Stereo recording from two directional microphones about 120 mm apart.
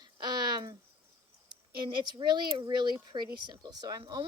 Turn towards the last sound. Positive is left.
turn(degrees=-35)  # may be behind; listen again after turning